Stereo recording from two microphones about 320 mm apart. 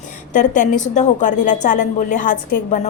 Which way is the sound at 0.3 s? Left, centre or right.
Left.